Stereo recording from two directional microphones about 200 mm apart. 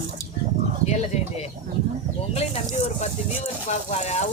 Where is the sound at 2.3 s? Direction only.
35° left (ahead or behind).